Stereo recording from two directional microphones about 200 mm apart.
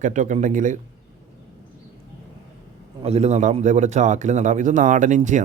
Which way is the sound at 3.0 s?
30° right (ahead or behind).